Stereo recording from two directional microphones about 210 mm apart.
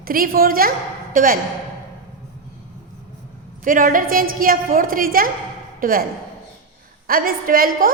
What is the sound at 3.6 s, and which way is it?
A woman's voice, 40° right (ahead or behind).